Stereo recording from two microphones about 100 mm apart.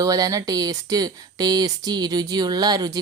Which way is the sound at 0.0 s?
40° right (ahead or behind).